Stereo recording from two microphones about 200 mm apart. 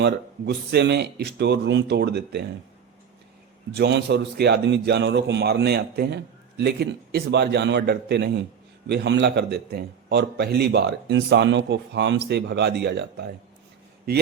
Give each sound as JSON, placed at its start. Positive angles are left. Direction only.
{"t": 0.0, "sound": "a man's voice", "side_deg": -55}
{"t": 3.8, "sound": "a man's voice", "side_deg": -60}